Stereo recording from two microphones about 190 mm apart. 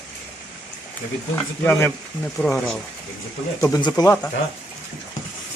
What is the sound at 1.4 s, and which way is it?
Speech, 10° left (ahead or behind).